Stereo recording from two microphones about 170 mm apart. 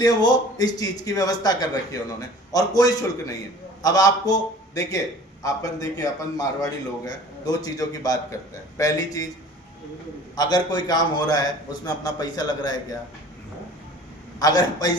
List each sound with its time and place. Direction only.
0.0 s a man's voice: 25° left (ahead or behind)
10.3 s a man's voice: 25° left (ahead or behind)
14.3 s a man's voice: 20° left (ahead or behind)